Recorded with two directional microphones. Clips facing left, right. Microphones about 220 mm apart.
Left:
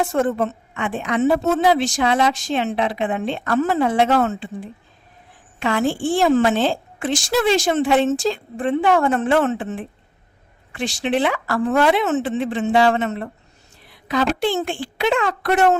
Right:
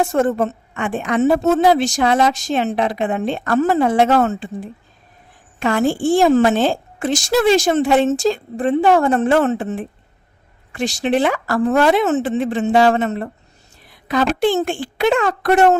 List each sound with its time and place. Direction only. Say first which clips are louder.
0.0 s a woman's voice: right 3 dB; 45° right (ahead or behind)